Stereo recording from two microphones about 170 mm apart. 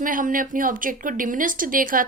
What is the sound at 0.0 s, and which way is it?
A woman's voice, 50° right (ahead or behind).